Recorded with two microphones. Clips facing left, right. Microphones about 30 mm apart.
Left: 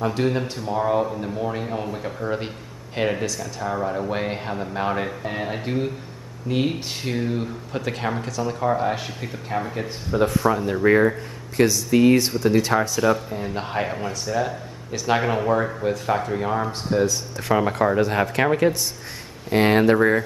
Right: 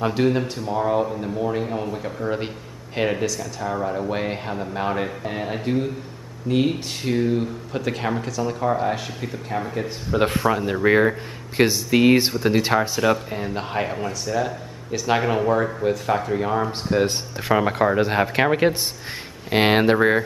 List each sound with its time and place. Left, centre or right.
0.1 s speech: centre
10.4 s speech: centre
13.5 s speech: centre
16.9 s speech: right
17.5 s speech: centre